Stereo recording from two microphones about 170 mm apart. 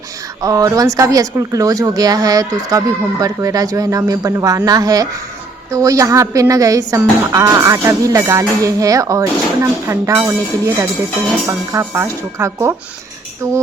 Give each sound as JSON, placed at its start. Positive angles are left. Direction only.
{"t": 0.4, "sound": "a woman's voice", "side_deg": -20}